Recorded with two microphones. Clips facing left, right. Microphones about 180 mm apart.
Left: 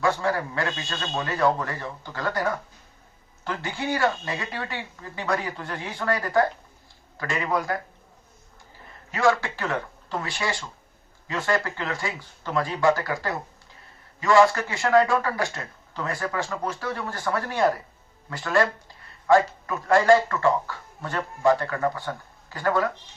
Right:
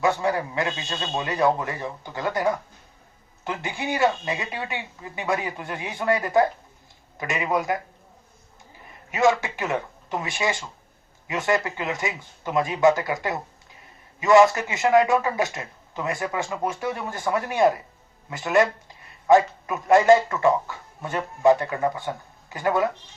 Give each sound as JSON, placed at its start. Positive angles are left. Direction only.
{"t": 0.0, "sound": "a man's voice", "side_deg": -20}
{"t": 9.1, "sound": "a man's voice", "side_deg": -20}